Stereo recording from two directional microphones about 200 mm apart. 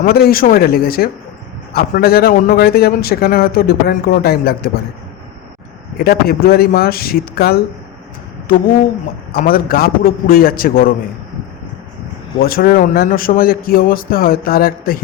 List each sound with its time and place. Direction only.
0.0 s a man's voice: 50° left (ahead or behind)
6.0 s a man's voice: 50° left (ahead or behind)
12.4 s a man's voice: 50° left (ahead or behind)